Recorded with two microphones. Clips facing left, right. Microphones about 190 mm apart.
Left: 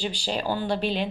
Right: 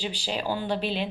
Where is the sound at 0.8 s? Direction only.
45° left (ahead or behind).